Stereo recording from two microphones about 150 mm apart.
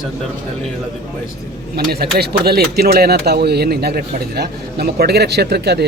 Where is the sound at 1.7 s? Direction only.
90° right.